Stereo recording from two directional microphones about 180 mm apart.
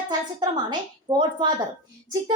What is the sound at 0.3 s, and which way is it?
A woman's voice, 25° right (ahead or behind).